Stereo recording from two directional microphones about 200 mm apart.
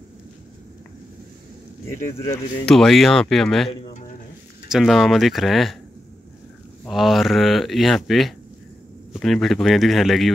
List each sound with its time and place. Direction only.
2.1 s speech: 15° left (ahead or behind)
2.6 s speech: centre (ahead or behind)
6.9 s speech: centre (ahead or behind)